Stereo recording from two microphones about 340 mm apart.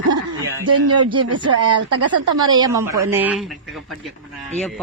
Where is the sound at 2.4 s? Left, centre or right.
Centre.